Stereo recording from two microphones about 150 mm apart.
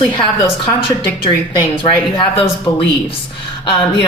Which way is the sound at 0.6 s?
35° left (ahead or behind).